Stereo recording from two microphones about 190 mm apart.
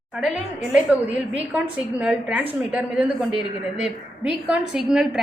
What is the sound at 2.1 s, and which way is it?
Speech, 5° right (ahead or behind).